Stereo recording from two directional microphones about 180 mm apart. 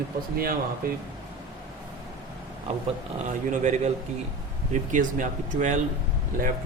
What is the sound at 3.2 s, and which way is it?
Speech, 45° right (ahead or behind).